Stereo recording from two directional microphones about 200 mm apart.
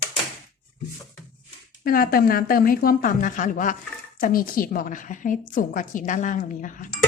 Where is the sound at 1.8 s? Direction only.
45° left (ahead or behind).